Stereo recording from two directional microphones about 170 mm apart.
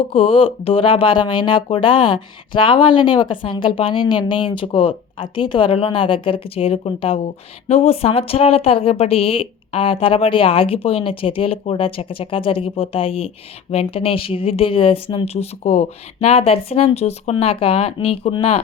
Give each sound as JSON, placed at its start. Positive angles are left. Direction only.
{"t": 0.1, "sound": "a woman's voice", "side_deg": 30}